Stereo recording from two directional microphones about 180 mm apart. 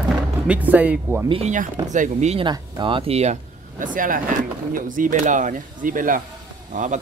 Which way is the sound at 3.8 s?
50° right (ahead or behind).